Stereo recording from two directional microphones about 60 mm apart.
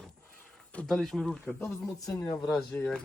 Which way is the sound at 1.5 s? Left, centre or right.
Left.